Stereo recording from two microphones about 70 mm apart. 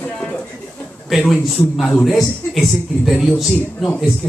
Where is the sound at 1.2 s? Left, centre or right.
Centre.